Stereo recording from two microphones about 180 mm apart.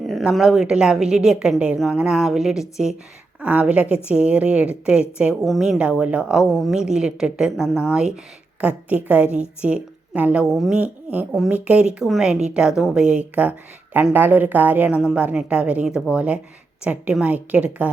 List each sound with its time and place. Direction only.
0.1 s a woman's voice: centre (ahead or behind)